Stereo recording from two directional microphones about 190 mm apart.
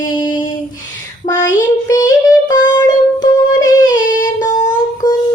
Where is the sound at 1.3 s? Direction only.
15° left (ahead or behind).